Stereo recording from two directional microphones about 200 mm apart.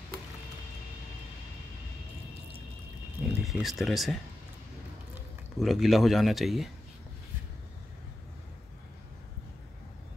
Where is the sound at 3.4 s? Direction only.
Centre (ahead or behind).